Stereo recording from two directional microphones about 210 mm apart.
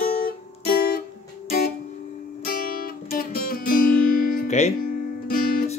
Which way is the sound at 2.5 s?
45° left (ahead or behind).